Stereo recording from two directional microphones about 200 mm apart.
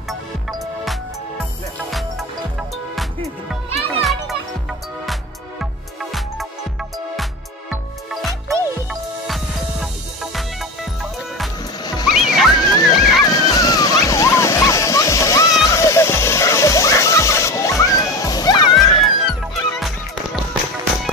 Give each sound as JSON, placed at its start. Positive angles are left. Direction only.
{"t": 1.4, "sound": "music", "side_deg": 0}
{"t": 4.0, "sound": "music", "side_deg": 0}
{"t": 7.7, "sound": "music", "side_deg": 0}
{"t": 10.3, "sound": "music", "side_deg": 0}
{"t": 11.8, "sound": "music", "side_deg": 20}
{"t": 12.1, "sound": "music", "side_deg": 0}
{"t": 12.5, "sound": "music", "side_deg": 20}
{"t": 13.2, "sound": "dog", "side_deg": 20}
{"t": 18.9, "sound": "music", "side_deg": 0}